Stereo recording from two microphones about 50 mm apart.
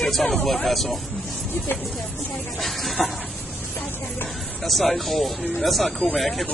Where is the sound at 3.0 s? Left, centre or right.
Centre.